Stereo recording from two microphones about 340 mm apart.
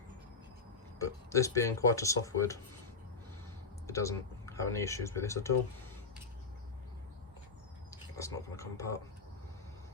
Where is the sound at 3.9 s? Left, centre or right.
Centre.